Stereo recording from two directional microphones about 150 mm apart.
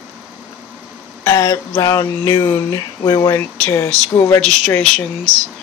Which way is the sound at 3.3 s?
15° left (ahead or behind).